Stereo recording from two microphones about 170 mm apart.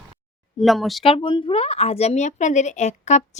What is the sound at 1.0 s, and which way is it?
Speech, 35° left (ahead or behind).